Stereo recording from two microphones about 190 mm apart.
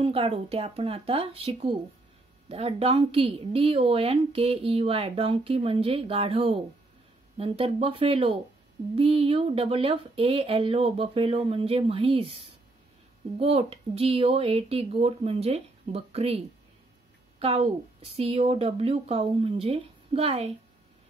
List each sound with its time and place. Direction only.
0.0 s speech: 30° right (ahead or behind)
13.4 s speech: 30° right (ahead or behind)